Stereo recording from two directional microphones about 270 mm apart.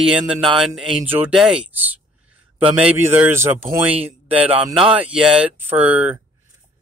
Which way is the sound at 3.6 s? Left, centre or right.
Right.